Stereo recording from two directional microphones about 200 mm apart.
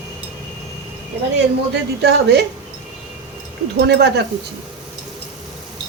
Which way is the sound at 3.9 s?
55° right (ahead or behind).